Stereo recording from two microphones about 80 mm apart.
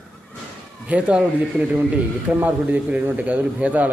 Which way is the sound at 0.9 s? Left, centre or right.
Centre.